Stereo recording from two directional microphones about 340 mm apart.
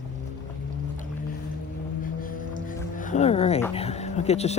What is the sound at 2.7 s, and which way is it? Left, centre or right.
Music, left.